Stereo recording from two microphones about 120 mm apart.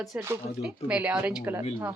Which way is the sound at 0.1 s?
10° right (ahead or behind).